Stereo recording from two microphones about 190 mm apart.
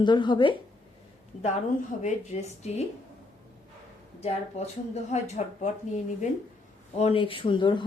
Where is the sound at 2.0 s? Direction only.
35° left (ahead or behind).